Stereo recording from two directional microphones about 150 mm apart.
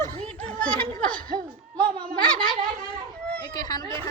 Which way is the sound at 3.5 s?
25° left (ahead or behind).